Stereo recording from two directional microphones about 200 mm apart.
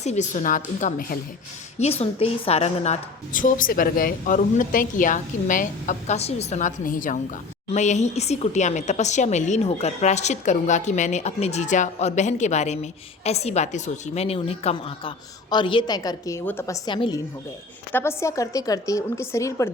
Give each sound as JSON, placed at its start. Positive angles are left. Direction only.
{"t": 0.0, "sound": "speech", "side_deg": 35}
{"t": 1.8, "sound": "a woman's voice", "side_deg": 30}